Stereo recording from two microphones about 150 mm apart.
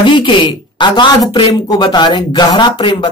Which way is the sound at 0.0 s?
35° left (ahead or behind).